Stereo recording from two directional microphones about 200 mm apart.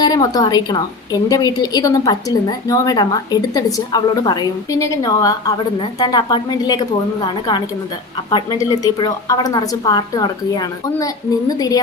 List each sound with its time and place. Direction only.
0.0 s a woman's voice: 20° left (ahead or behind)
8.7 s a woman's voice: 20° left (ahead or behind)